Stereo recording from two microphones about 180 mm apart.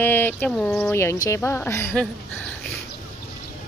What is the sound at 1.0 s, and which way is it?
Speech, 15° left (ahead or behind).